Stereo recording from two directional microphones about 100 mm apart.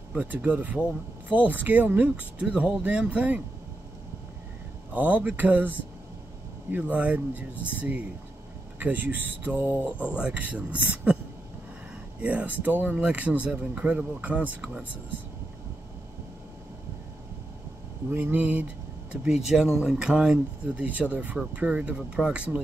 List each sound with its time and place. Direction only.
0.1 s speech: 15° right (ahead or behind)
4.9 s speech: 15° right (ahead or behind)
12.2 s speech: 15° right (ahead or behind)
18.1 s speech: 15° right (ahead or behind)